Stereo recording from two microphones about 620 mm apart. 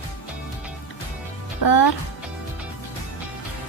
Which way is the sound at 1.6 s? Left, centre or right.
Left.